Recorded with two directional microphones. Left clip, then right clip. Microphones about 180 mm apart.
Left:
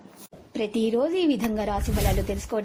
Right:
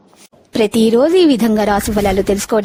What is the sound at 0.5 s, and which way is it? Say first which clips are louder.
A woman's voice: right 13 dB; 85° right.